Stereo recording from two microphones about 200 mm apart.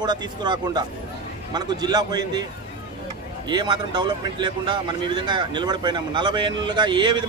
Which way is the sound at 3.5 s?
20° right (ahead or behind).